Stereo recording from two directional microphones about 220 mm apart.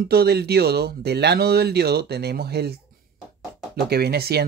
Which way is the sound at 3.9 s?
45° right (ahead or behind).